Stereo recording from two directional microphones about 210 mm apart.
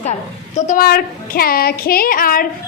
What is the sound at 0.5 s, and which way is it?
Child singing, 35° left (ahead or behind).